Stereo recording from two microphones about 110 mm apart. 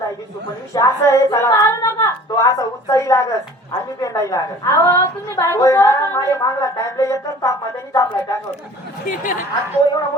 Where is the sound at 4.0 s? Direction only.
30° left (ahead or behind).